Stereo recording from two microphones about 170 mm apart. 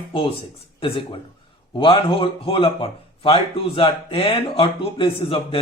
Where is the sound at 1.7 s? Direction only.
30° left (ahead or behind).